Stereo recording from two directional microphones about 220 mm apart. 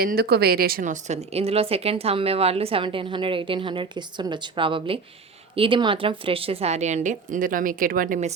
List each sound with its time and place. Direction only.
0.0 s a woman's voice: 45° right (ahead or behind)